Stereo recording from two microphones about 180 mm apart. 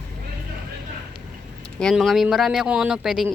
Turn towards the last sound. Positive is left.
turn(degrees=0)  # may be behind; listen again after turning